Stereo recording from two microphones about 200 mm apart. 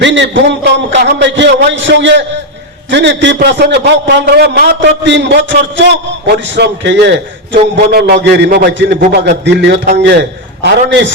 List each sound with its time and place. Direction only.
0.0 s a man's voice: 65° right (ahead or behind)